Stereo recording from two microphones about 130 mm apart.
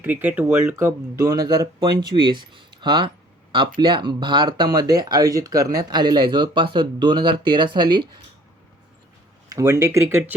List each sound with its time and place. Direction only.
0.0 s speech: 15° right (ahead or behind); by 8.1 s 35° right (ahead or behind)
9.5 s speech: 25° right (ahead or behind)